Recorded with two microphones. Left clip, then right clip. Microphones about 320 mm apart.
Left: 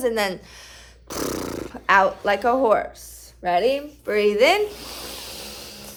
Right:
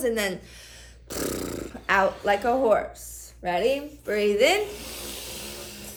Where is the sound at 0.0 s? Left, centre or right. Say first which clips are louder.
Left 3 dB; centre.